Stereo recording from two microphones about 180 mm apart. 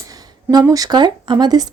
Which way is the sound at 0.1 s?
20° right (ahead or behind).